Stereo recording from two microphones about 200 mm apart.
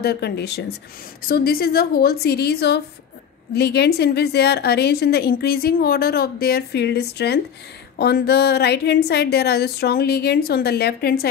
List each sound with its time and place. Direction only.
0.0 s a woman's voice: 55° left (ahead or behind)